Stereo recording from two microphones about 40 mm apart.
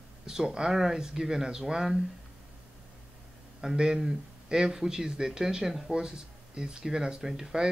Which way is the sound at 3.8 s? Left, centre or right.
Centre.